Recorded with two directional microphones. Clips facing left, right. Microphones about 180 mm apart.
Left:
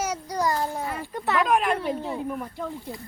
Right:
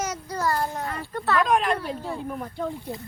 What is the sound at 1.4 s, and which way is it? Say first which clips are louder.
Speech: left 1 dB; 5° left (ahead or behind).